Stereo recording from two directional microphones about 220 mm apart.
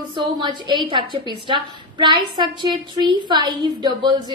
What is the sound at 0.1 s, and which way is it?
A woman's voice, 20° right (ahead or behind).